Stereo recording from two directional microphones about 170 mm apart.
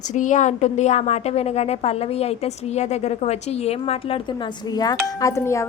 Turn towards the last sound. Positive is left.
turn(degrees=15)  # may be behind; listen again after turning